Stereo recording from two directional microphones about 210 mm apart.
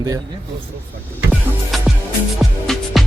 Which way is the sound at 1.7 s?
Centre (ahead or behind).